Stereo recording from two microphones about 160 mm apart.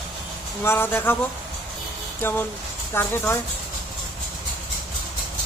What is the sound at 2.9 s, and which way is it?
Speech, 15° left (ahead or behind).